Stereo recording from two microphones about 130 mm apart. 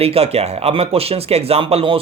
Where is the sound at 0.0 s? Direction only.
50° right (ahead or behind).